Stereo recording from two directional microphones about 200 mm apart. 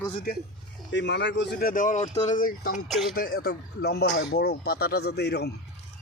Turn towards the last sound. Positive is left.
turn(degrees=55)  # may be behind; listen again after turning